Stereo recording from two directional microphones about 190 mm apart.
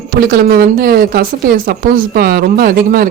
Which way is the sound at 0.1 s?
55° right (ahead or behind).